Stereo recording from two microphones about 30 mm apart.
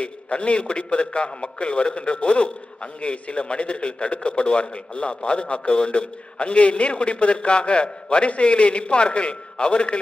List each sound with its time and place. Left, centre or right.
0.0 s a man's voice: left